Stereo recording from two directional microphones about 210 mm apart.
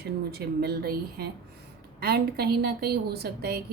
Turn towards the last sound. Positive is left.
turn(degrees=-50)  # may be behind; listen again after turning